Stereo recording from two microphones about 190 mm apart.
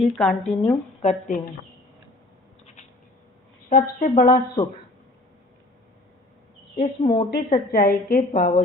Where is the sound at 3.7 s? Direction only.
45° left (ahead or behind).